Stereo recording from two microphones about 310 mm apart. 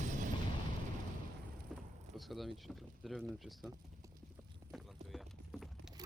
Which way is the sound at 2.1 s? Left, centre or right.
Centre.